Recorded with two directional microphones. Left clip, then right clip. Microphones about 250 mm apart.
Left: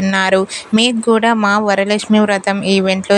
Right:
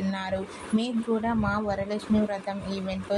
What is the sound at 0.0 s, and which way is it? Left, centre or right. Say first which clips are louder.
Speech: left 17 dB; left.